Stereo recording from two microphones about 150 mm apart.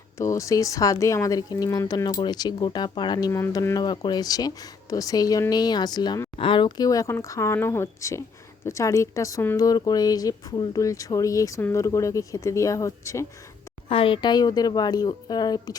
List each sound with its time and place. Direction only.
0.2 s speech: 20° left (ahead or behind)
13.8 s speech: 35° left (ahead or behind)